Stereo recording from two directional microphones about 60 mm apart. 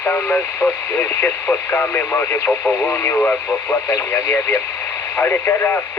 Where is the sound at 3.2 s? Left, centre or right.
Left.